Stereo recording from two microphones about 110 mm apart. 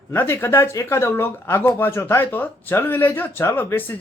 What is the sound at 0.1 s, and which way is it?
Speech, 20° left (ahead or behind).